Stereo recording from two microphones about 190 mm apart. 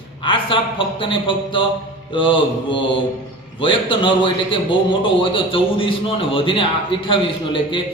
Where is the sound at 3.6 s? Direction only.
25° left (ahead or behind).